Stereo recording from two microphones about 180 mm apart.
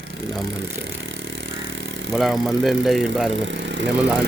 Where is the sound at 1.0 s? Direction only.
90° right.